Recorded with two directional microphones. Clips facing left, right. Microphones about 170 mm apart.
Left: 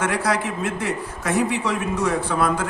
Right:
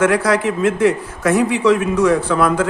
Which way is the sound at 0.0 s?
90° right.